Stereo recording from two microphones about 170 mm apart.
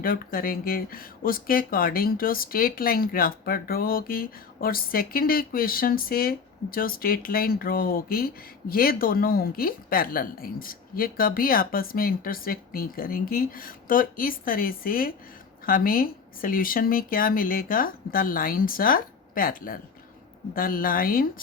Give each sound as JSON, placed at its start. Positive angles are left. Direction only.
{"t": 0.0, "sound": "speech", "side_deg": 60}